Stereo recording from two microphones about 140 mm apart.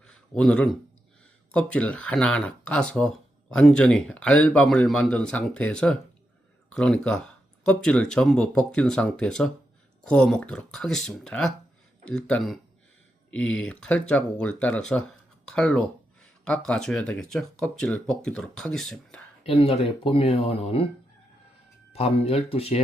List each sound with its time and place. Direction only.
0.0 s a sound: 5° left (ahead or behind)
1.5 s speech: 10° left (ahead or behind)
19.5 s speech: 40° left (ahead or behind)
21.9 s speech: 45° left (ahead or behind)